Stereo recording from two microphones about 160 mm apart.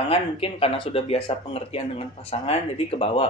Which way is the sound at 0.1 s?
35° left (ahead or behind).